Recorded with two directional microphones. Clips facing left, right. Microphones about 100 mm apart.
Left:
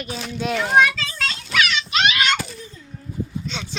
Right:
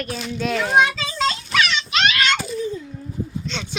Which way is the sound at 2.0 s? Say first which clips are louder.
Right 1 dB; 10° left (ahead or behind).